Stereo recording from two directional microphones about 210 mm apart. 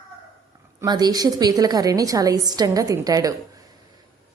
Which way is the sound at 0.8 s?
20° right (ahead or behind).